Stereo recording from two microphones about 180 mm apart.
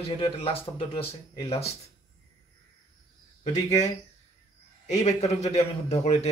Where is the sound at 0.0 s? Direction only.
30° left (ahead or behind).